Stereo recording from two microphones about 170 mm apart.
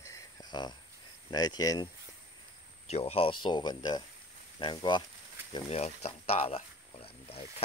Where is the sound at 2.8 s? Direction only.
35° left (ahead or behind).